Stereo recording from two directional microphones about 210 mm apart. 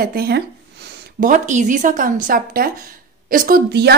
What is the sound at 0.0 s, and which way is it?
A woman's voice, 45° right (ahead or behind).